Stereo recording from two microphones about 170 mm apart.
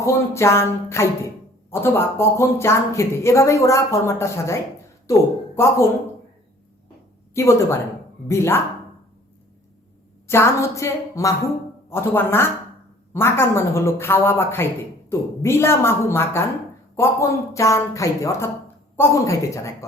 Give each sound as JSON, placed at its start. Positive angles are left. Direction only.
{"t": 0.0, "sound": "a woman's voice", "side_deg": 15}
{"t": 7.3, "sound": "a woman's voice", "side_deg": 15}
{"t": 10.2, "sound": "a woman's voice", "side_deg": 15}